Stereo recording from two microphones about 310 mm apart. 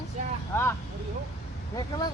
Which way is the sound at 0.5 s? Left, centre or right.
Centre.